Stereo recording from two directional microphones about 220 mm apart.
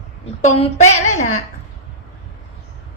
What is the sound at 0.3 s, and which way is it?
Speech, 30° left (ahead or behind).